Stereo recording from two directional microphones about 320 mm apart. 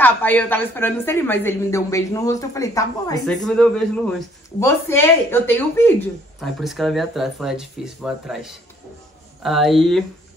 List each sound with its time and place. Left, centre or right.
0.0 s a woman's voice: centre